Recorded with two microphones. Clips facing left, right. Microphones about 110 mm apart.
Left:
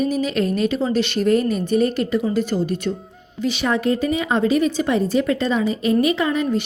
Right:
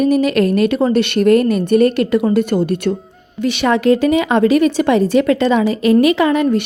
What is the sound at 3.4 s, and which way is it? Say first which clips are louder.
A woman's voice: right 6 dB; 75° right (ahead or behind).